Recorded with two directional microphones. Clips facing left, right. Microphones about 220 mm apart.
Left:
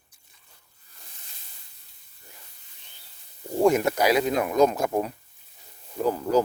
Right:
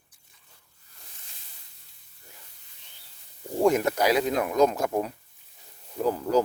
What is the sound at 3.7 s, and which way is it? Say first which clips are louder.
Speech: left 1 dB; 10° left (ahead or behind).